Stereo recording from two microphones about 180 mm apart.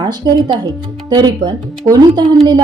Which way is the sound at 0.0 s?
25° right (ahead or behind).